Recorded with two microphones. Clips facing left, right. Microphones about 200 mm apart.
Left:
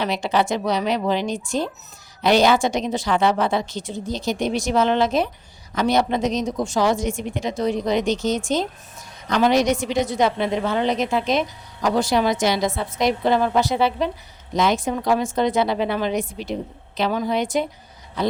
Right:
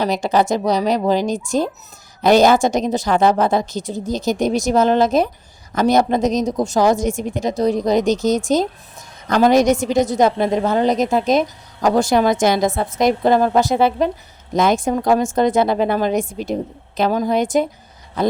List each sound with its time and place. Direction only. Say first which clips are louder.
0.0 s a woman's voice: right 4 dB; 40° right (ahead or behind)